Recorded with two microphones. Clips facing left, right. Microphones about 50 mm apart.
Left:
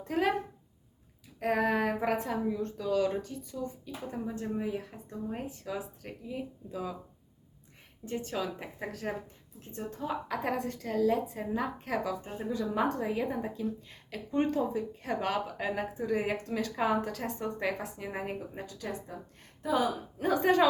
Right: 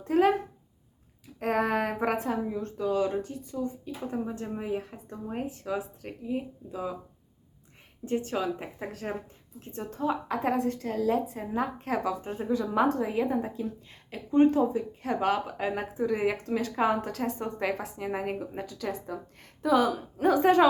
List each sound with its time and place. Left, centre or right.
0.1 s speech: right
1.4 s speech: right
5.5 s speech: right
8.0 s speech: right
9.1 s speech: centre
9.7 s speech: right
14.5 s speech: right
16.2 s speech: right
18.6 s speech: right
20.1 s speech: right